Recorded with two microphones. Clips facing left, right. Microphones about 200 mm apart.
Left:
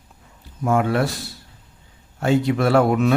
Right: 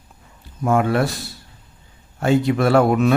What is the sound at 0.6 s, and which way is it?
Speech, 55° right (ahead or behind).